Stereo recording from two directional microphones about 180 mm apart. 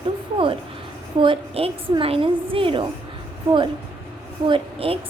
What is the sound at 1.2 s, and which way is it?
A woman's voice, 30° right (ahead or behind).